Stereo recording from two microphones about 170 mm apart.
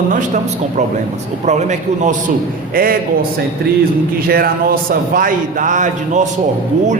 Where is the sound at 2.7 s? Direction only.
60° right (ahead or behind).